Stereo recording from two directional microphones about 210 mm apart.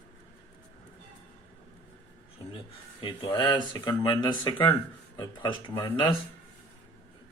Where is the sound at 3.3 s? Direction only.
20° left (ahead or behind).